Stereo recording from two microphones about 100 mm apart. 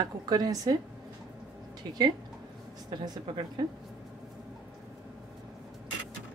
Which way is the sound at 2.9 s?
45° right (ahead or behind).